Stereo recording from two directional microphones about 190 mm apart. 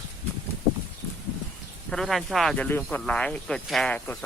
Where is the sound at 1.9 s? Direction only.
Centre (ahead or behind).